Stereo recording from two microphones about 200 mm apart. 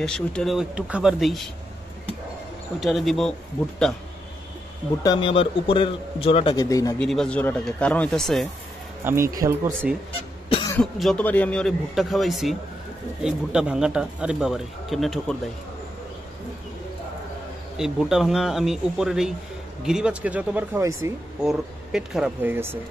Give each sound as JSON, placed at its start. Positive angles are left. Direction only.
{"t": 0.0, "sound": "a man's voice", "side_deg": 5}
{"t": 2.8, "sound": "a man's voice", "side_deg": 0}
{"t": 5.0, "sound": "a man's voice", "side_deg": 25}
{"t": 7.0, "sound": "a man's voice", "side_deg": 5}
{"t": 9.0, "sound": "speech", "side_deg": -15}
{"t": 10.8, "sound": "a man's voice", "side_deg": 5}
{"t": 17.7, "sound": "a man's voice", "side_deg": -5}